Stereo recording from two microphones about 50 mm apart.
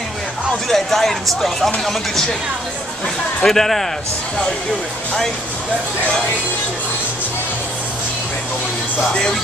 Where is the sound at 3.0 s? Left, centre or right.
Centre.